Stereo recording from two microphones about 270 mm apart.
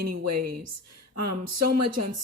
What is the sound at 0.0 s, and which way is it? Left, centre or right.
Speech, right.